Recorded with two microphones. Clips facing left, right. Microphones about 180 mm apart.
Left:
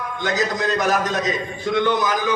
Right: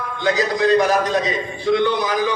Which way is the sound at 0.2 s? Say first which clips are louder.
Right 4 dB; 45° left (ahead or behind).